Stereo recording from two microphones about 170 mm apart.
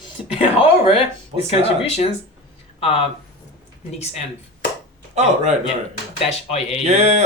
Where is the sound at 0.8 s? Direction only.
35° left (ahead or behind).